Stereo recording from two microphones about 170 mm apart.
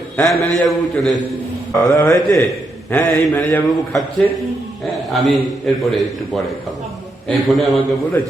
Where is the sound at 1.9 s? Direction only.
20° left (ahead or behind).